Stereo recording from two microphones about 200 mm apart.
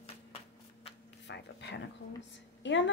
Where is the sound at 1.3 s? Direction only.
60° left (ahead or behind).